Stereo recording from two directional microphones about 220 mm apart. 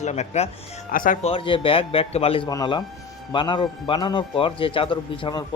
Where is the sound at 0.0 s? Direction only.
30° left (ahead or behind).